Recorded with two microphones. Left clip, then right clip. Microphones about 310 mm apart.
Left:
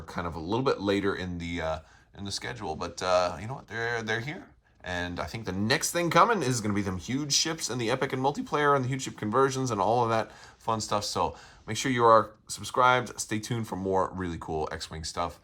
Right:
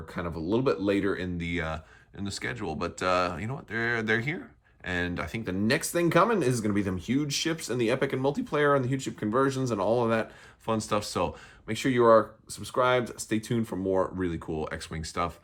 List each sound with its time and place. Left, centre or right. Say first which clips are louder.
0.1 s speech: right 1 dB; centre